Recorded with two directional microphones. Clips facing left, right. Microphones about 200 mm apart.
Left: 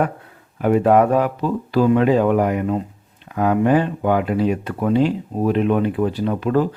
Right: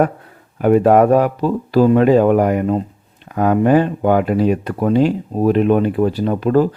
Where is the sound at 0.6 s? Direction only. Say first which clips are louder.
Right 3 dB; 45° right (ahead or behind).